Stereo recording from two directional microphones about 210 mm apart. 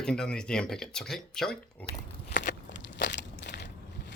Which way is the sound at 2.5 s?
55° left (ahead or behind).